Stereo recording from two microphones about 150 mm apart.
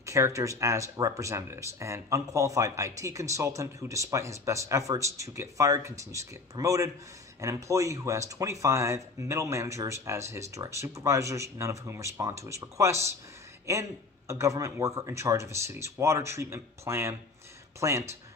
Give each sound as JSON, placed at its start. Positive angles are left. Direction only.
{"t": 0.0, "sound": "speech", "side_deg": -20}